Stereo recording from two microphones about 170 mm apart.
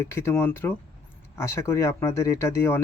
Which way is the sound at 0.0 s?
15° left (ahead or behind).